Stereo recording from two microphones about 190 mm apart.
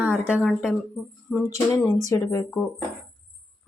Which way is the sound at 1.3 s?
Centre (ahead or behind).